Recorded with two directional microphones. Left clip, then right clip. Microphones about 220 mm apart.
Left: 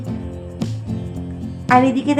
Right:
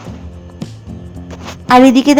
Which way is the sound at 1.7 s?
35° right (ahead or behind).